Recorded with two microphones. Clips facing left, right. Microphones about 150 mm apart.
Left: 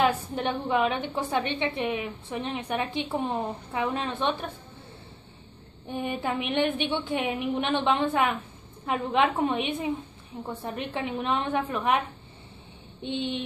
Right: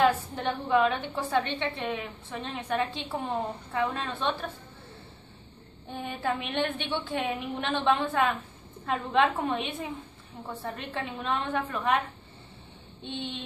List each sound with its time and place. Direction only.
0.0 s a woman's voice: 20° left (ahead or behind)
5.9 s a woman's voice: 15° left (ahead or behind)
13.0 s a woman's voice: 15° left (ahead or behind)